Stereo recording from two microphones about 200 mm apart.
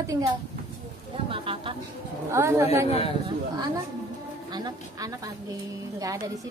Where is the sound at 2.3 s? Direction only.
10° right (ahead or behind).